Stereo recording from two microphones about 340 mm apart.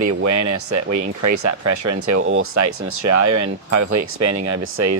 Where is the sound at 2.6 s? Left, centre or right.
Right.